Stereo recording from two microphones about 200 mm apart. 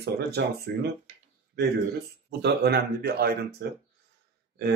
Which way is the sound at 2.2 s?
55° right (ahead or behind).